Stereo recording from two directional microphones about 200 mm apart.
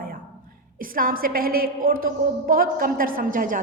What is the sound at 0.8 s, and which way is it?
A woman's voice, 45° right (ahead or behind).